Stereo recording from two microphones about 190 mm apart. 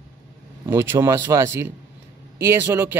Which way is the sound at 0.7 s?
15° right (ahead or behind).